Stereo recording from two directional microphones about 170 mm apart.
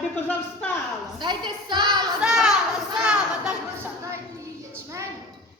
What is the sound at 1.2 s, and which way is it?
Speech, 25° right (ahead or behind).